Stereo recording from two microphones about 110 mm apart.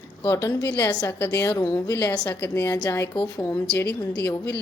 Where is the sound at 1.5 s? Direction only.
30° left (ahead or behind).